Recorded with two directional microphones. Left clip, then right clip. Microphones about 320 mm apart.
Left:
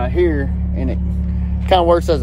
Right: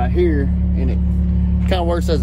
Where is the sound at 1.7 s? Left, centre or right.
Left.